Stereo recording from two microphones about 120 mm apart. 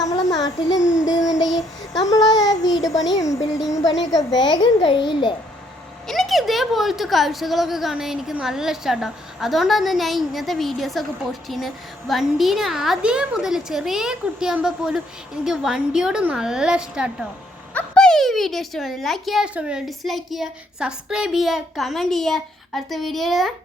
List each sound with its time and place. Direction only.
0.0 s child singing: 30° left (ahead or behind)
3.2 s a sound: 30° left (ahead or behind)
3.7 s a child's voice: 30° left (ahead or behind)
6.1 s speech: centre (ahead or behind)
17.7 s speech: 5° left (ahead or behind)